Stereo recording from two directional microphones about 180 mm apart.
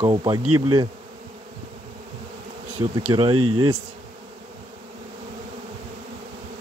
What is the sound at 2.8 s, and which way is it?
Speech, 20° right (ahead or behind).